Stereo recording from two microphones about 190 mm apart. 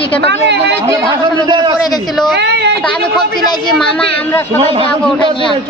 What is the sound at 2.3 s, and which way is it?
Speech, 65° right (ahead or behind).